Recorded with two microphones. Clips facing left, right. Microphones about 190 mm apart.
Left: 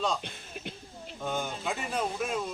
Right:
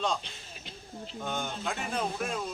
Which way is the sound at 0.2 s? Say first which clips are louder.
Left 6 dB; 55° left (ahead or behind).